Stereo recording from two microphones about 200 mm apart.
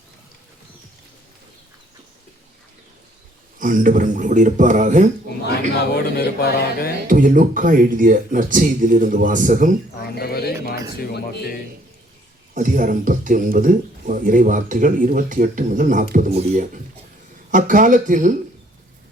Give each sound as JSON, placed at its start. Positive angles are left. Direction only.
{"t": 3.6, "sound": "speech", "side_deg": -40}
{"t": 6.1, "sound": "speech", "side_deg": 50}
{"t": 7.1, "sound": "speech", "side_deg": -40}
{"t": 10.0, "sound": "bird", "side_deg": 50}
{"t": 11.0, "sound": "speech", "side_deg": 55}
{"t": 12.5, "sound": "speech", "side_deg": -40}